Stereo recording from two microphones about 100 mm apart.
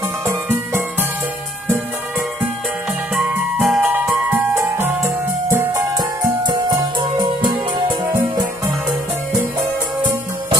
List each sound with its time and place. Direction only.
3.6 s music: 5° right (ahead or behind)
4.1 s music: 15° right (ahead or behind)
5.5 s music: 30° right (ahead or behind)
6.4 s music: 45° right (ahead or behind)